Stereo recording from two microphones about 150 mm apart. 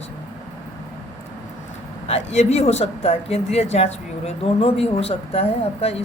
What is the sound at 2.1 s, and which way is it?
Speech, 50° left (ahead or behind).